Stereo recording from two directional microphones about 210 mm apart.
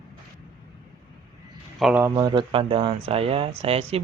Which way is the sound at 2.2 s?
20° right (ahead or behind).